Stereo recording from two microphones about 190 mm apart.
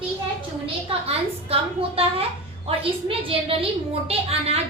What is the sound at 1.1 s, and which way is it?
A woman's voice, 30° right (ahead or behind).